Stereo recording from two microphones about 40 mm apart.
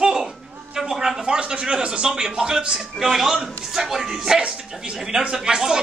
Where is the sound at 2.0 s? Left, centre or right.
Centre.